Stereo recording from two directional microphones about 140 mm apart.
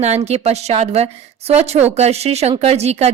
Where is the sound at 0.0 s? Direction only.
50° right (ahead or behind).